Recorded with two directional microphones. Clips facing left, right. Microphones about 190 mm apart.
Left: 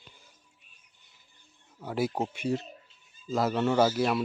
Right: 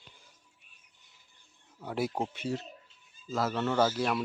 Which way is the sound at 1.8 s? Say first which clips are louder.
Left 3 dB; centre (ahead or behind).